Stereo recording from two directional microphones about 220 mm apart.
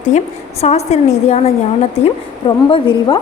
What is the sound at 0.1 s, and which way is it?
A woman's voice, 30° left (ahead or behind).